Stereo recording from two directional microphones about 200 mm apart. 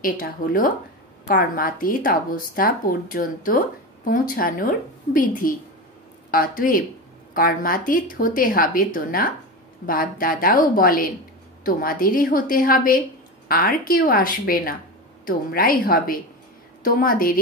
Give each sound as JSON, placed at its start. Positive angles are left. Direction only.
{"t": 0.0, "sound": "speech", "side_deg": 45}